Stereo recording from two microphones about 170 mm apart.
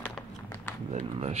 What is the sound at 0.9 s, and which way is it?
Speech, 40° right (ahead or behind).